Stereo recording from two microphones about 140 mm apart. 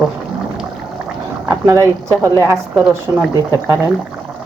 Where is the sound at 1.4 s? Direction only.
20° right (ahead or behind).